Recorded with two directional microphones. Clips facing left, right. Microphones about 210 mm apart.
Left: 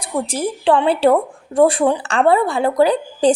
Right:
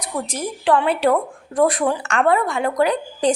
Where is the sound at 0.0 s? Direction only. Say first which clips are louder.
Left 5 dB; 30° left (ahead or behind).